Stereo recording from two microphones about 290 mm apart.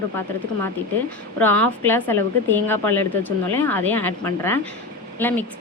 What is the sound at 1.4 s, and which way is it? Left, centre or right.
Speech, centre.